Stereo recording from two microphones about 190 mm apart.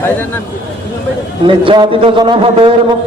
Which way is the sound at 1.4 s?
25° right (ahead or behind).